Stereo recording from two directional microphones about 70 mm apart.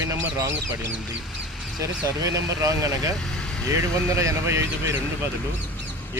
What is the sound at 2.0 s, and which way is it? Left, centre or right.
Speech, right.